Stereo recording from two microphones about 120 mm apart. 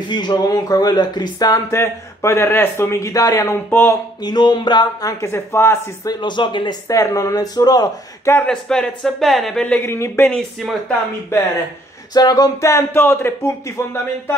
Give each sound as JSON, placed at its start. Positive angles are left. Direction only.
{"t": 0.1, "sound": "speech", "side_deg": 35}
{"t": 4.2, "sound": "speech", "side_deg": 35}
{"t": 5.2, "sound": "speech", "side_deg": 20}
{"t": 6.0, "sound": "speech", "side_deg": 40}
{"t": 6.9, "sound": "speech", "side_deg": 25}
{"t": 8.5, "sound": "speech", "side_deg": 5}
{"t": 10.3, "sound": "speech", "side_deg": 5}
{"t": 12.1, "sound": "speech", "side_deg": 35}